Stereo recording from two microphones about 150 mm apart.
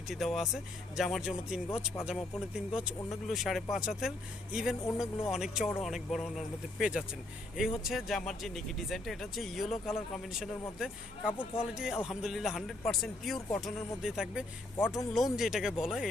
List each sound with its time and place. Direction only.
0.1 s speech: centre (ahead or behind)
14.8 s speech: 15° left (ahead or behind)
15.1 s speech: centre (ahead or behind)